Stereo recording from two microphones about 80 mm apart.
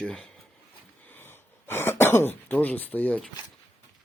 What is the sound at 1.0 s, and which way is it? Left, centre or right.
Throat clearing, left.